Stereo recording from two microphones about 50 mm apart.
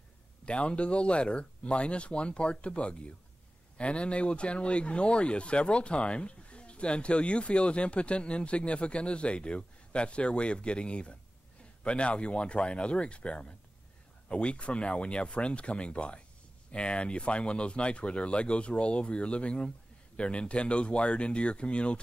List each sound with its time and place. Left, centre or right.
0.5 s speech: left